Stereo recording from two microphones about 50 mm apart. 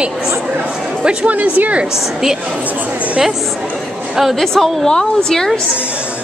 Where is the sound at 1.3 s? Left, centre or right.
Right.